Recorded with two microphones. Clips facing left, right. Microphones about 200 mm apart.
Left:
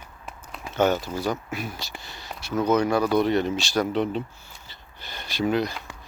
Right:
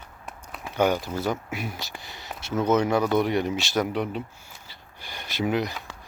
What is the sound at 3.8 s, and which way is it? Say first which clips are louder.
Speech: left 3 dB; 10° right (ahead or behind).